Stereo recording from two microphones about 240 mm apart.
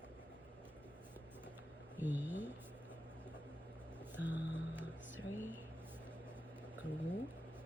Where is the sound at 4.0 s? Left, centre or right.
Centre.